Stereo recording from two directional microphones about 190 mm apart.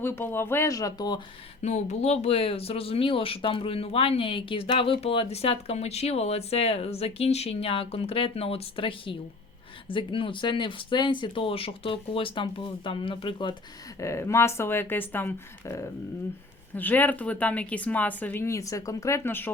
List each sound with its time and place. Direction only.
0.0 s speech: 10° left (ahead or behind)
1.6 s speech: 35° left (ahead or behind)
14.0 s speech: 15° left (ahead or behind)